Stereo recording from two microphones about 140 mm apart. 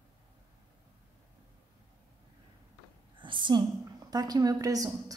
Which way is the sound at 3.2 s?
35° right (ahead or behind).